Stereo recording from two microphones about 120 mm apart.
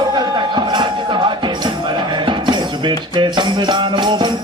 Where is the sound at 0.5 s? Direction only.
40° right (ahead or behind).